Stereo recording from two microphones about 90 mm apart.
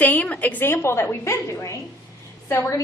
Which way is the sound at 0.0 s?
15° left (ahead or behind).